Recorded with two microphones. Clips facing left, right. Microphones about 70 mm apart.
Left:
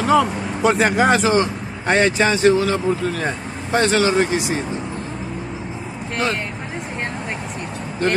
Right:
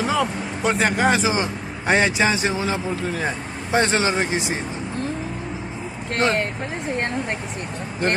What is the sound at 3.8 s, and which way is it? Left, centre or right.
Speech, right.